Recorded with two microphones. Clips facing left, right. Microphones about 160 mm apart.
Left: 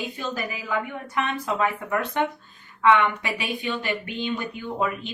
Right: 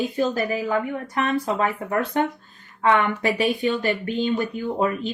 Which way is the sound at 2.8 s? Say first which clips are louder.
Even; 40° right (ahead or behind).